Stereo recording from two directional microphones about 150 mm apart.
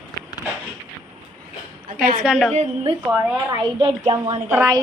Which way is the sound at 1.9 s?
75° right (ahead or behind).